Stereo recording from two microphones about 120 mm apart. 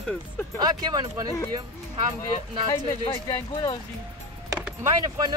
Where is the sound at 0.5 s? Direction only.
35° right (ahead or behind).